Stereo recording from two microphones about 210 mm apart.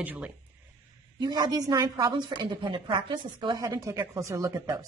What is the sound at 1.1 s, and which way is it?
A woman's voice, 20° right (ahead or behind).